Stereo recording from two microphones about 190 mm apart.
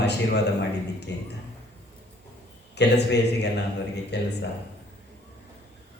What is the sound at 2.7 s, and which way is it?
A man's voice, 60° left (ahead or behind).